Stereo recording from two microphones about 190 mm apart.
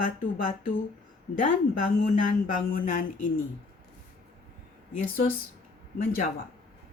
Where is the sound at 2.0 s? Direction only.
45° left (ahead or behind).